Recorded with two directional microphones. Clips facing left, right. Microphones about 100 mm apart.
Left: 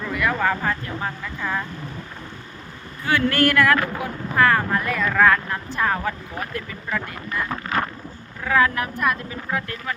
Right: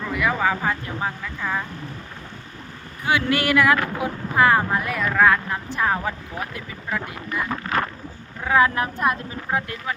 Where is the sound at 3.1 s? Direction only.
15° right (ahead or behind).